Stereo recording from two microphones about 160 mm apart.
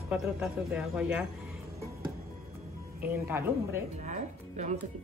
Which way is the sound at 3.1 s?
15° right (ahead or behind).